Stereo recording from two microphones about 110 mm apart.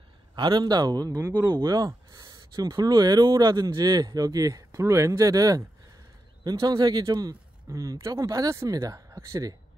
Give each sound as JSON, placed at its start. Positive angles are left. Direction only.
{"t": 0.4, "sound": "speech", "side_deg": -40}